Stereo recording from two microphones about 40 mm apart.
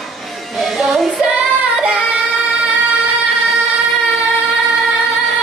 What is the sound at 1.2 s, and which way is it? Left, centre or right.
Singing, right.